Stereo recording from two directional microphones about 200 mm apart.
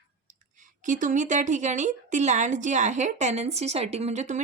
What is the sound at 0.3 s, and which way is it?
Speech, 40° right (ahead or behind).